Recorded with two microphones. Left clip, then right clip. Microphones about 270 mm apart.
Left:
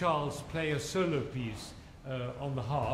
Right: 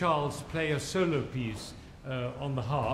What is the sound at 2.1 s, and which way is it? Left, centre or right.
Speech, right.